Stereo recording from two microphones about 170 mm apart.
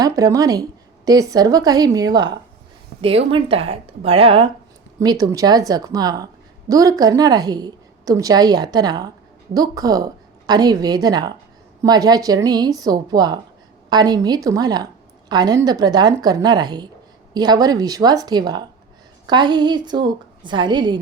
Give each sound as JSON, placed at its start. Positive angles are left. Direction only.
{"t": 0.0, "sound": "a woman's voice", "side_deg": -20}
{"t": 4.9, "sound": "a woman's voice", "side_deg": -20}